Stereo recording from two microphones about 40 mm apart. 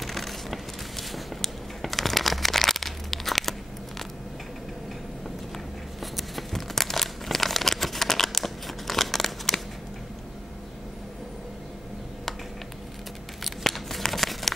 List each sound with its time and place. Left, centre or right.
0.0 s a sound: centre
6.1 s crumpling: centre
13.4 s crumpling: centre